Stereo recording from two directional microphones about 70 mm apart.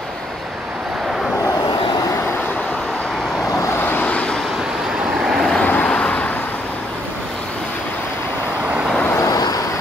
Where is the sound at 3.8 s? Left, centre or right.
Left.